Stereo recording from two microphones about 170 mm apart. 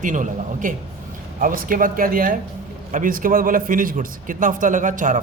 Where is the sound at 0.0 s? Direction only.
50° right (ahead or behind).